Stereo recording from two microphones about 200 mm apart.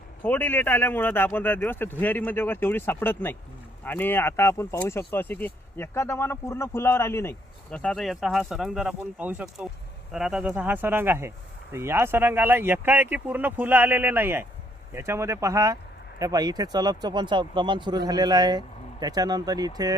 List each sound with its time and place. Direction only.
0.2 s speech: 10° left (ahead or behind); by 20.0 s 20° right (ahead or behind)